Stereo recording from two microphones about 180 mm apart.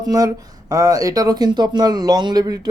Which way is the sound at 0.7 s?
20° right (ahead or behind).